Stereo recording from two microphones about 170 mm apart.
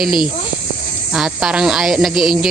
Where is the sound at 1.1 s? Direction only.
5° right (ahead or behind).